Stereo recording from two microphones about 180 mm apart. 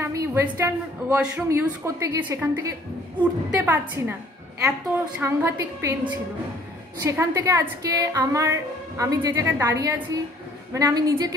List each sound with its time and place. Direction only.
0.0 s a sound: 15° right (ahead or behind)
0.6 s a woman's voice: 10° right (ahead or behind)
5.2 s a woman's voice: 15° right (ahead or behind)